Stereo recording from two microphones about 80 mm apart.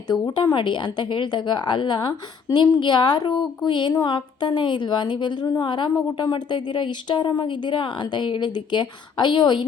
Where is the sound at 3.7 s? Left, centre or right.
Left.